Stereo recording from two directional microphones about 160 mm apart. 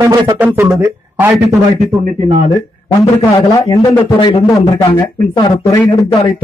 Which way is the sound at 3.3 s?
20° left (ahead or behind).